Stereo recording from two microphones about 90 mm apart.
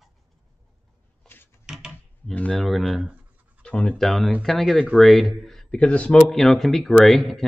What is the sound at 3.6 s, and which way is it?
Pant, 10° left (ahead or behind).